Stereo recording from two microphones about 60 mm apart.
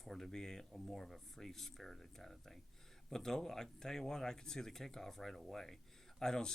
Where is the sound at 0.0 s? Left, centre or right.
Centre.